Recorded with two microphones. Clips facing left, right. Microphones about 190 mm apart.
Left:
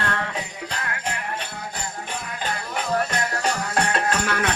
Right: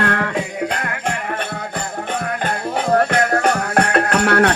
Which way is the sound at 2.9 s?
60° right (ahead or behind).